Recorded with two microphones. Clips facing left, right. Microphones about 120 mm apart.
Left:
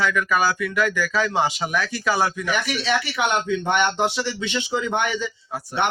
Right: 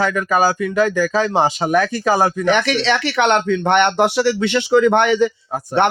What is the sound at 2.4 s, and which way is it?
A man's voice, 75° right (ahead or behind).